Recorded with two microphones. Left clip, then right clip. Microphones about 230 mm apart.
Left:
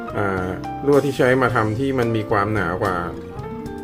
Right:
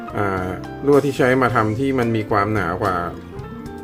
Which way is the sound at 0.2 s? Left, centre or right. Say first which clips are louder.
Right 1 dB; centre.